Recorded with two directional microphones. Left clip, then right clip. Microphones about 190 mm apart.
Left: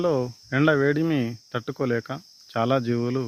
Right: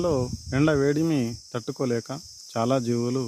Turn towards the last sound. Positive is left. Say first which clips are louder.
# left 1 dB
turn(degrees=-15)  # may be behind; listen again after turning